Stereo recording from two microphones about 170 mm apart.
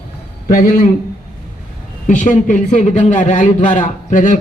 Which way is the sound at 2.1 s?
50° left (ahead or behind).